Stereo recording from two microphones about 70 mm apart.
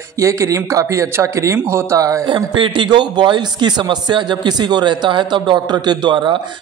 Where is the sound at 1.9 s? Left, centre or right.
Right.